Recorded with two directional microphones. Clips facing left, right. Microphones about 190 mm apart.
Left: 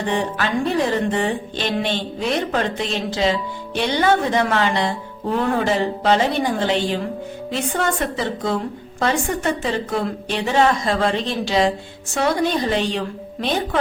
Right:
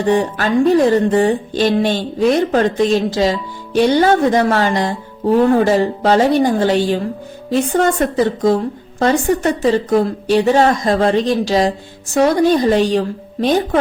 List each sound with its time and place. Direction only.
0.1 s a woman's voice: 40° right (ahead or behind)